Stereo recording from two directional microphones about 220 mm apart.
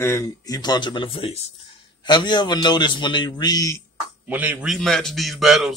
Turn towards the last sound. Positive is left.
turn(degrees=0)  # may be behind; listen again after turning